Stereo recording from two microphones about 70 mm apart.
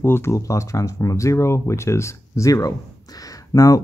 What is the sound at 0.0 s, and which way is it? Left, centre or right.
Speech, left.